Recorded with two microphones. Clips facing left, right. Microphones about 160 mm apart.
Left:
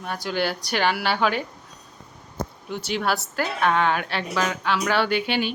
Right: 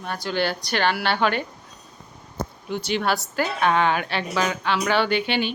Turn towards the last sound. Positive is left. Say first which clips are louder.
# right 1 dB
turn(degrees=5)  # may be behind; listen again after turning